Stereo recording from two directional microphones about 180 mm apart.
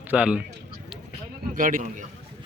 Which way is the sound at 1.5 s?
50° right (ahead or behind).